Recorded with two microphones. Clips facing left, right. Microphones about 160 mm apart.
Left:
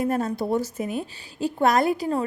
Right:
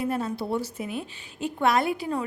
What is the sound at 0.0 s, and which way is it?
A woman's voice, 45° left (ahead or behind).